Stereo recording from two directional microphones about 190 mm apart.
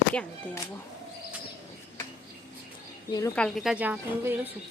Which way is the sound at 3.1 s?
20° left (ahead or behind).